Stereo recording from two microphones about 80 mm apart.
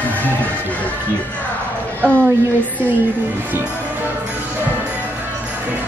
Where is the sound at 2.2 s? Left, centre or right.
Right.